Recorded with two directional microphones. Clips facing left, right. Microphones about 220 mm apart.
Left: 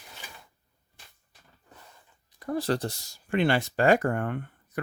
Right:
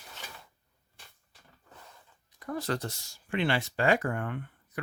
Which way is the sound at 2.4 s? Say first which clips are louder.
Left 5 dB; 30° left (ahead or behind).